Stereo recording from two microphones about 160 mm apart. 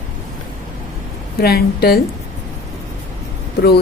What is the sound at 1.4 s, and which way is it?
Speech, 75° left (ahead or behind).